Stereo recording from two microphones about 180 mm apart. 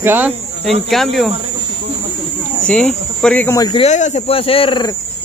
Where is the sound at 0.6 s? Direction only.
Centre (ahead or behind).